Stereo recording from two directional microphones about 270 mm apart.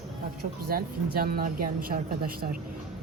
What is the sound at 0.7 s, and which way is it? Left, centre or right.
Speech, right.